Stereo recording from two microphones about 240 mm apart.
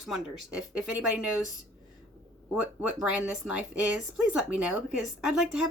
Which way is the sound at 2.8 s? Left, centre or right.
Centre.